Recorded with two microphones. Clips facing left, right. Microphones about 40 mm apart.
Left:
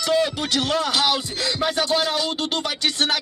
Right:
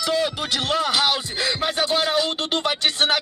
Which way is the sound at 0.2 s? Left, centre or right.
Centre.